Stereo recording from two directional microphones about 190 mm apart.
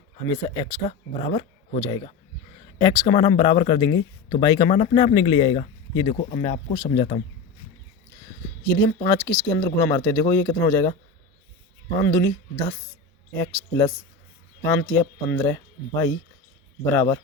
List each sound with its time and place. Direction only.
0.3 s speech: 20° left (ahead or behind)
8.8 s speech: 20° left (ahead or behind)
12.0 s speech: 15° left (ahead or behind)